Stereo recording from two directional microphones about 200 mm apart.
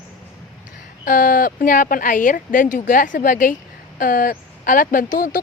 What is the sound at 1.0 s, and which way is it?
Speech, 45° left (ahead or behind).